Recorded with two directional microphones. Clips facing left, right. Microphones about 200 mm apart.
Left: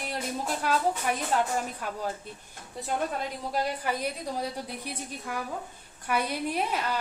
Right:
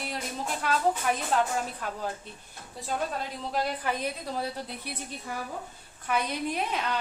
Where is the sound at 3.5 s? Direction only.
10° left (ahead or behind).